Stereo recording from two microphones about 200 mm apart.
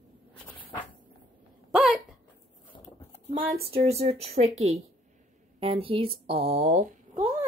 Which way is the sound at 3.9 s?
30° right (ahead or behind).